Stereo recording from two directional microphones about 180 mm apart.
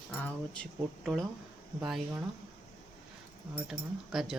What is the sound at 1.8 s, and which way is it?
Speech, 5° right (ahead or behind).